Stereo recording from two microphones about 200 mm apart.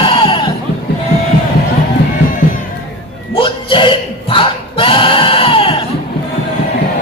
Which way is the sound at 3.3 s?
25° left (ahead or behind).